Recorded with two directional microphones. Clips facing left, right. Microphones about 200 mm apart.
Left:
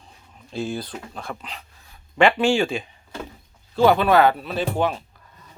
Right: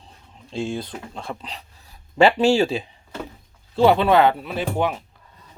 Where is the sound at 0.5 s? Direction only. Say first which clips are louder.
Right 1 dB; 25° right (ahead or behind).